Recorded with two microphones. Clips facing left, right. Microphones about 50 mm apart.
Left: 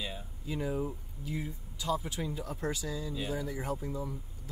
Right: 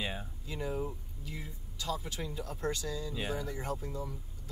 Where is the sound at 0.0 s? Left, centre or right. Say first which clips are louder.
Right 2 dB; right.